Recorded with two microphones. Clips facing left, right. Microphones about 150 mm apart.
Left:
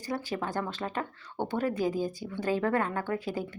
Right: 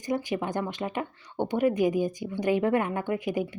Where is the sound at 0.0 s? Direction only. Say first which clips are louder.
Right 4 dB; 15° right (ahead or behind).